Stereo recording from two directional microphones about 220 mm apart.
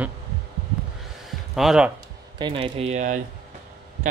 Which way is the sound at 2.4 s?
25° right (ahead or behind).